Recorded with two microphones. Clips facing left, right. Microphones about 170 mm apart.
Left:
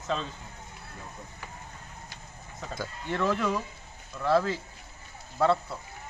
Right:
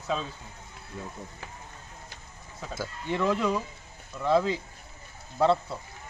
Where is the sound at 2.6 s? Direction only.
5° right (ahead or behind).